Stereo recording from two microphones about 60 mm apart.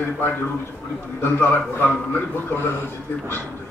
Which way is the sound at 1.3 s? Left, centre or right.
Left.